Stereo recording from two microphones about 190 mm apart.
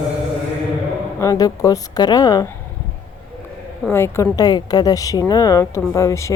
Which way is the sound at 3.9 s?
15° left (ahead or behind).